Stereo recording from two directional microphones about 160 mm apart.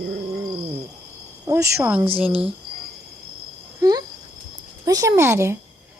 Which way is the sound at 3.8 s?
25° right (ahead or behind).